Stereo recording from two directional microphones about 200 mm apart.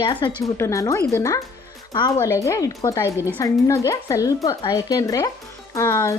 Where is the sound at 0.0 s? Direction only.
25° left (ahead or behind).